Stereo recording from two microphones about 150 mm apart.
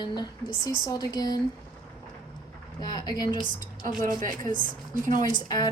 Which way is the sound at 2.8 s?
25° left (ahead or behind).